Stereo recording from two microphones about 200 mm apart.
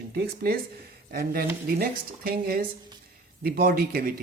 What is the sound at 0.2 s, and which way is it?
Speech, 50° right (ahead or behind).